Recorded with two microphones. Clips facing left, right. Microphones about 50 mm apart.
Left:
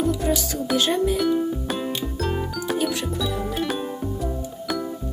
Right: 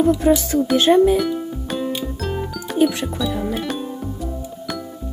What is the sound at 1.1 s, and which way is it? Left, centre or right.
Music, centre.